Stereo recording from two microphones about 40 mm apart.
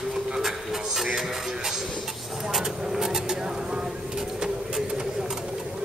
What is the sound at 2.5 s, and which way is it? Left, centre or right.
Speech, centre.